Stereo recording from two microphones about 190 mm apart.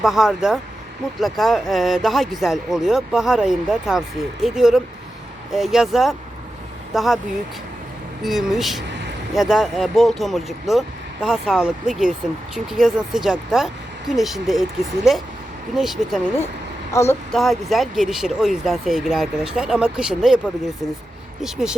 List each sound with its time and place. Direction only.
0.0 s speech: centre (ahead or behind)
8.2 s speech: centre (ahead or behind)
16.9 s speech: 15° left (ahead or behind)
17.3 s speech: centre (ahead or behind)
21.4 s speech: 5° right (ahead or behind)